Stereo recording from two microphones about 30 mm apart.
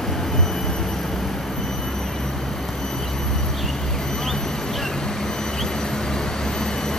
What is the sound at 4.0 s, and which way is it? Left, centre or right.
Vehicle, left.